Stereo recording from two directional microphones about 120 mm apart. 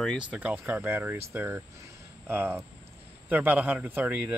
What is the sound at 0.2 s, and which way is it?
Speech, 10° right (ahead or behind).